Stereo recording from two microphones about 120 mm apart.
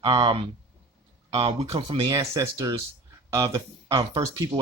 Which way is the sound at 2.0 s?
30° right (ahead or behind).